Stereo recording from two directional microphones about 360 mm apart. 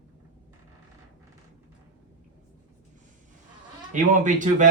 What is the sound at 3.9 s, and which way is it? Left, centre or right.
Speech, right.